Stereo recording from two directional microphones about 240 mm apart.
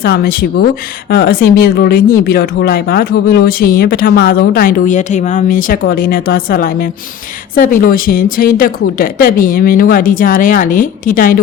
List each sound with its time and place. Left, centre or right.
0.0 s speech: left